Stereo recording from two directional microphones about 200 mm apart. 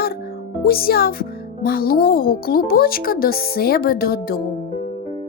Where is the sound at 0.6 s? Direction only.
50° left (ahead or behind).